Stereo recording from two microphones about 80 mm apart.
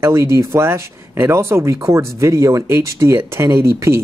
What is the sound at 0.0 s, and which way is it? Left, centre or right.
Speech, right.